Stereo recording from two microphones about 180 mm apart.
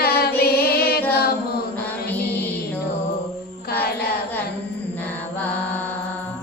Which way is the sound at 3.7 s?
60° left (ahead or behind).